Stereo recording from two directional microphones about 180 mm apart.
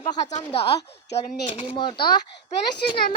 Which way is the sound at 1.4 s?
25° left (ahead or behind).